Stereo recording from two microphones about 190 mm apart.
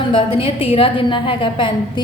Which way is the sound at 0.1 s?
25° left (ahead or behind).